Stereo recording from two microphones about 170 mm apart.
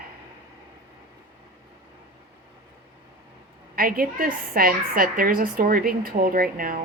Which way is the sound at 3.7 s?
60° right (ahead or behind).